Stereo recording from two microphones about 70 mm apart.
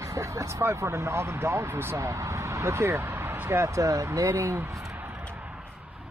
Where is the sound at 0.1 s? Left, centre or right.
Right.